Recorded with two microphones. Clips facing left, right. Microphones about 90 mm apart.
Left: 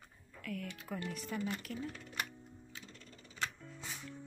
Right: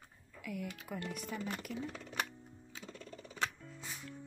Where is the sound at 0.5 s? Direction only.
10° right (ahead or behind).